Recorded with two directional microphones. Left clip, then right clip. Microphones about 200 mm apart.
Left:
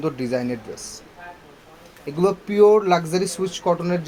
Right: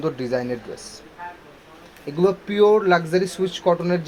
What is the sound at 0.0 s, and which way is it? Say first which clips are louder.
Speech: even; 35° left (ahead or behind).